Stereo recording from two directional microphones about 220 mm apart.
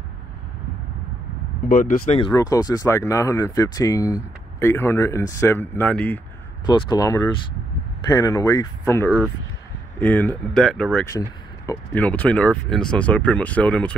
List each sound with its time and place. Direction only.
1.7 s speech: 40° left (ahead or behind); by 6.2 s 5° left (ahead or behind)
6.6 s speech: 20° left (ahead or behind); by 11.1 s 5° left (ahead or behind)
11.1 s speech: 15° left (ahead or behind)